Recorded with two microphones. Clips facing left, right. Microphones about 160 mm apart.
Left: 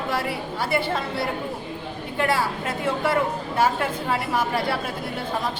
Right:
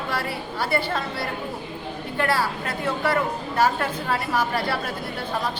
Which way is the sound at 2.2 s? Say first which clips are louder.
Left 1 dB; 20° left (ahead or behind).